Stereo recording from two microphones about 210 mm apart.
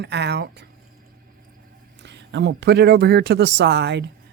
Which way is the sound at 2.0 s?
55° right (ahead or behind).